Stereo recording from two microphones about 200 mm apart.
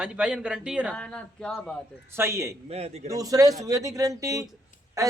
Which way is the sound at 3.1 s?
15° right (ahead or behind).